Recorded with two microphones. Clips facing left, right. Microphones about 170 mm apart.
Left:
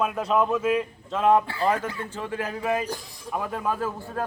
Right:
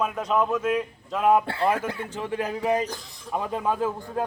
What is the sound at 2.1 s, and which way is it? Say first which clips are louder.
A man's voice: right 2 dB; 15° right (ahead or behind).